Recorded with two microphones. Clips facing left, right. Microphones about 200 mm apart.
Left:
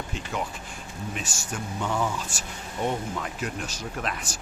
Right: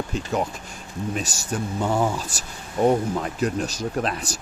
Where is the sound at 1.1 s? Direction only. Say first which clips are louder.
Right 7 dB; 40° right (ahead or behind).